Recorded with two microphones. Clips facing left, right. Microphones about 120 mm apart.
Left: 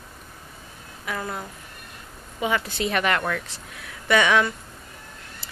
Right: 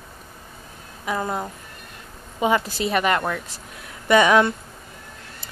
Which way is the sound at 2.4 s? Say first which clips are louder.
Right 4 dB; 30° right (ahead or behind).